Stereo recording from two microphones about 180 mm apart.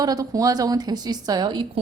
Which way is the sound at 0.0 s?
20° right (ahead or behind).